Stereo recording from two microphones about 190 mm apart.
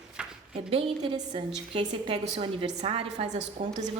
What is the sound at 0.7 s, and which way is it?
A woman's voice, 30° right (ahead or behind).